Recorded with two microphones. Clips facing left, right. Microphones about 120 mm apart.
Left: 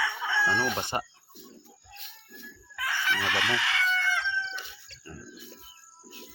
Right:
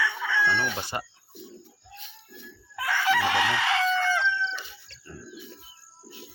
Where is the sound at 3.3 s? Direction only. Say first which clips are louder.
Right 5 dB; 35° right (ahead or behind).